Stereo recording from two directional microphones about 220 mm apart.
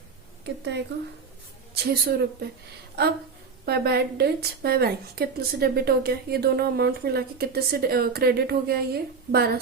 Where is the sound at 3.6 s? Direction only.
45° right (ahead or behind).